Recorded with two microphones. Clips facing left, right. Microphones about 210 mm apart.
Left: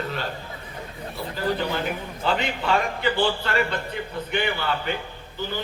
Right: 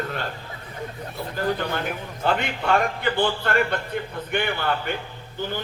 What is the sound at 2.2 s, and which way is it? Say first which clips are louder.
Speech: right 1 dB; 55° right (ahead or behind).